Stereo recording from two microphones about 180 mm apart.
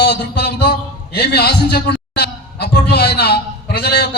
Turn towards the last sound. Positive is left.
turn(degrees=65)  # may be behind; listen again after turning